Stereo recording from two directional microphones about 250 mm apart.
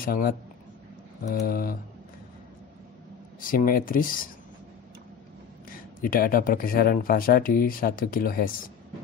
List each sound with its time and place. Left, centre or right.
0.0 s speech: left
1.3 s speech: left
3.3 s speech: left
5.7 s speech: left